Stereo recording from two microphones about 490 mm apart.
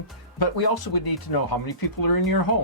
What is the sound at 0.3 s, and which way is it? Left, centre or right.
Speech, left.